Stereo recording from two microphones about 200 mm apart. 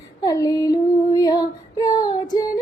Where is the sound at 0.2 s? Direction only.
20° left (ahead or behind).